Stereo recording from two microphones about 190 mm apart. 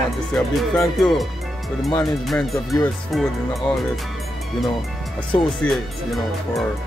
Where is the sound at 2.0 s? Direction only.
Centre (ahead or behind).